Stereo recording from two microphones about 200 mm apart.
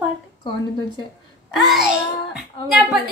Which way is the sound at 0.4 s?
25° left (ahead or behind).